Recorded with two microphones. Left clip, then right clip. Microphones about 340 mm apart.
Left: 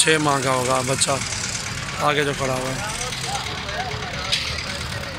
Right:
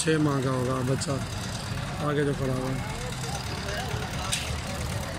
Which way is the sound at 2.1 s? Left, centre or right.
Left.